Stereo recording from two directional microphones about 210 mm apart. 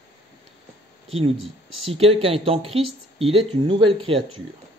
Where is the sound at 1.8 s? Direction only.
25° right (ahead or behind).